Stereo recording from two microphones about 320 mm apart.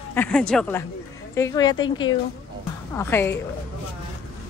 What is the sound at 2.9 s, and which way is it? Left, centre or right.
Speech, centre.